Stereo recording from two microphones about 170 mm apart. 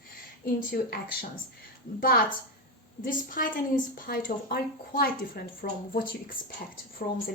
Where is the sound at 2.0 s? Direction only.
60° left (ahead or behind).